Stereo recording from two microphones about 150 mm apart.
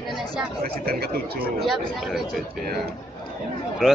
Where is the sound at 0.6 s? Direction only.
90° right.